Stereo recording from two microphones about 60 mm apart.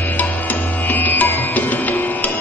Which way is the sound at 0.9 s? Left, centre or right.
Left.